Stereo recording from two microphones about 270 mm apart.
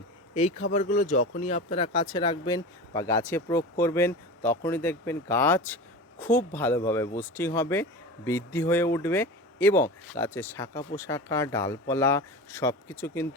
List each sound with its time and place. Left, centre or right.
0.3 s speech: left; by 13.2 s centre